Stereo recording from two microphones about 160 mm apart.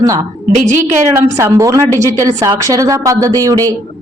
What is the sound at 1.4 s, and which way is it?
A woman's voice, 20° right (ahead or behind).